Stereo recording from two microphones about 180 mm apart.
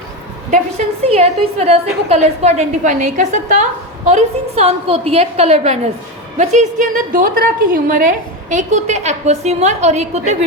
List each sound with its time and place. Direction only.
1.0 s a woman's voice: 35° right (ahead or behind)